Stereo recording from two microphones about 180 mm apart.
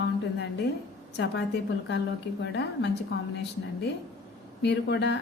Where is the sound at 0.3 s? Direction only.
70° left (ahead or behind).